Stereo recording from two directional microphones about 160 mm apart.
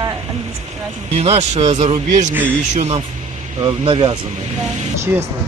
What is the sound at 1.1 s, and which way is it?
Speech, 40° right (ahead or behind).